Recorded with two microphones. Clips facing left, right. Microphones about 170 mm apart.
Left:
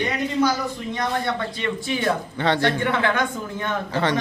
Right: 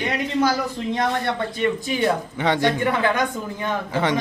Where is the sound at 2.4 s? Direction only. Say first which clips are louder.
Right 1 dB; 15° right (ahead or behind).